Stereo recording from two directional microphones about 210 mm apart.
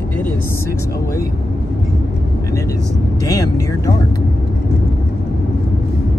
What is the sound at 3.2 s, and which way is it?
Speech, 15° left (ahead or behind).